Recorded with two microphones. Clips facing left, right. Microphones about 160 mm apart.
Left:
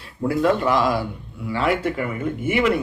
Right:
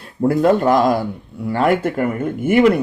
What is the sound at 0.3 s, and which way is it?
A man's voice, 45° right (ahead or behind).